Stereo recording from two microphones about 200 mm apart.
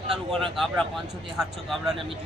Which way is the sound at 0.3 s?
Centre (ahead or behind).